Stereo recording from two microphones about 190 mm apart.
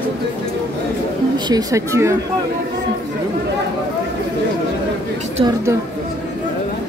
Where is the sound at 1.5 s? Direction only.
20° right (ahead or behind).